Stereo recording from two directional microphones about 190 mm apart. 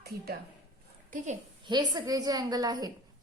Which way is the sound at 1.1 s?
40° right (ahead or behind).